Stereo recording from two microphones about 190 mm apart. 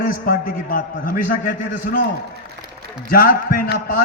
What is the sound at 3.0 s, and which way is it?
Speech, 50° left (ahead or behind).